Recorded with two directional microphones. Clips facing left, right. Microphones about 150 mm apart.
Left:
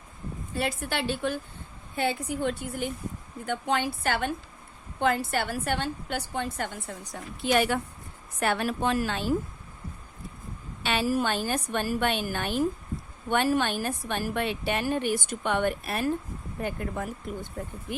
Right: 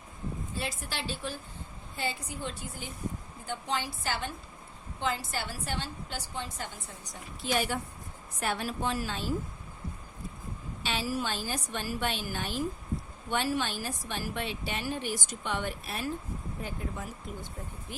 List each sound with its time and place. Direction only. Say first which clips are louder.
0.5 s a woman's voice: left 11 dB; 60° left (ahead or behind)
10.8 s a woman's voice: left 6 dB; 55° left (ahead or behind)